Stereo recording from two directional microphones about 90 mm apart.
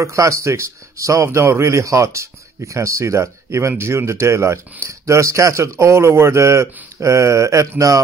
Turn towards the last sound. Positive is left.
turn(degrees=-35)  # may be behind; listen again after turning